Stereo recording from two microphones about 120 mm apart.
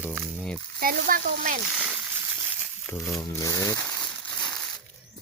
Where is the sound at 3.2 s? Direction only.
30° left (ahead or behind); by 4.5 s 15° left (ahead or behind).